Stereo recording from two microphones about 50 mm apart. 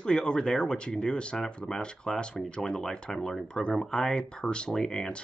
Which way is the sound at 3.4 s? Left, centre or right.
Centre.